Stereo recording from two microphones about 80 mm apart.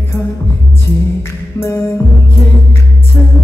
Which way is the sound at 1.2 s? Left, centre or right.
Left.